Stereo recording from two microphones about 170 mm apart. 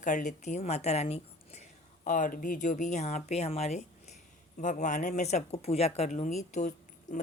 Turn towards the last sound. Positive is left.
turn(degrees=45)  # may be behind; listen again after turning